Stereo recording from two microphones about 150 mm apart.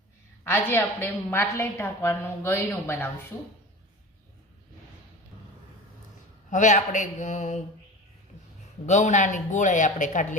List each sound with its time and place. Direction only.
0.4 s a woman's voice: 15° left (ahead or behind)
6.5 s speech: 55° left (ahead or behind)
8.9 s speech: 55° left (ahead or behind)